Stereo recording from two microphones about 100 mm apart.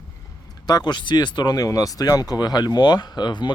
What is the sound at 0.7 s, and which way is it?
Speech, 45° left (ahead or behind).